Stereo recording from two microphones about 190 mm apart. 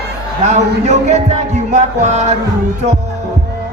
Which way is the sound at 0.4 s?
35° right (ahead or behind).